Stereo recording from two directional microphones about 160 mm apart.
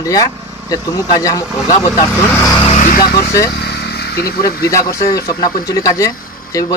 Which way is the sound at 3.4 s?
85° left.